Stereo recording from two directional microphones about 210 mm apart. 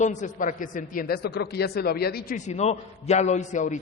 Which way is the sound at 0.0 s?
35° left (ahead or behind).